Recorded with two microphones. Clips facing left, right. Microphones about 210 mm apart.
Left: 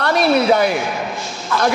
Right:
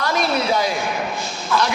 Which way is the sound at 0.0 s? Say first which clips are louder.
Left 6 dB; 65° left (ahead or behind).